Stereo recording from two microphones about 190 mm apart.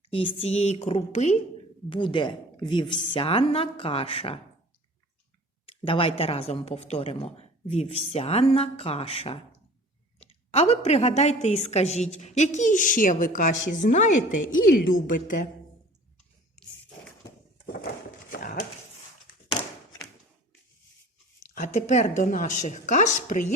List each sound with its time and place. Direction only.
0.1 s a woman's voice: 30° left (ahead or behind)
5.8 s a woman's voice: 30° left (ahead or behind)
18.3 s dog: 50° left (ahead or behind)
21.5 s a woman's voice: 45° left (ahead or behind)